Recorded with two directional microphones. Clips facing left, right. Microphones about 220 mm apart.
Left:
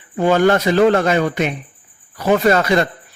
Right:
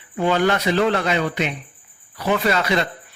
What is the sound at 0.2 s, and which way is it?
A man's voice, 45° left (ahead or behind).